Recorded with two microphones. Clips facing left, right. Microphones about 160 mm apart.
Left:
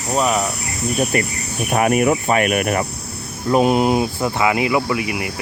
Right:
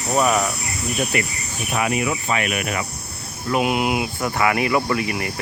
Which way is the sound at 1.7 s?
50° left (ahead or behind).